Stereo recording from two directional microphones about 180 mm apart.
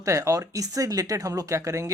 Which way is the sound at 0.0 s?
15° right (ahead or behind).